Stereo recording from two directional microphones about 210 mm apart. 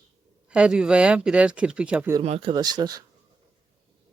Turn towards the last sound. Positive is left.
turn(degrees=-20)  # may be behind; listen again after turning